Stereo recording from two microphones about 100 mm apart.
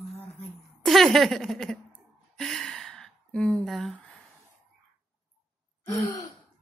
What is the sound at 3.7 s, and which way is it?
Humming, centre (ahead or behind).